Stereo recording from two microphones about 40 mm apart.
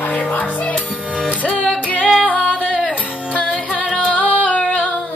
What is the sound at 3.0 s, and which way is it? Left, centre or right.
Music, left.